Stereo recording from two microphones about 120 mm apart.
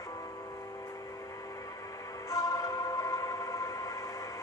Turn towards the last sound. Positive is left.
turn(degrees=30)  # may be behind; listen again after turning